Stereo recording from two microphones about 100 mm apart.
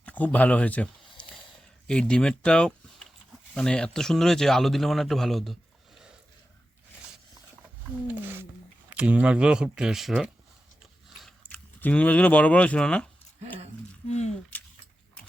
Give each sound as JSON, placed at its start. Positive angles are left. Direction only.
{"t": 0.0, "sound": "speech", "side_deg": 15}
{"t": 1.9, "sound": "a man's voice", "side_deg": 10}
{"t": 8.0, "sound": "speech", "side_deg": -20}
{"t": 11.4, "sound": "speech", "side_deg": 15}
{"t": 14.5, "sound": "a sound", "side_deg": 15}